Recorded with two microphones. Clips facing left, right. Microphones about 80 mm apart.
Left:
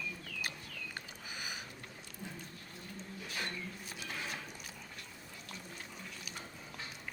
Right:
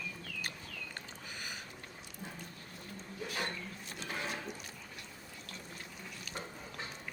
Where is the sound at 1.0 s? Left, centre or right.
Centre.